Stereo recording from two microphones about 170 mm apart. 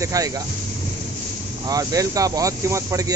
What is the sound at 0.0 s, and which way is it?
Speech, 20° right (ahead or behind).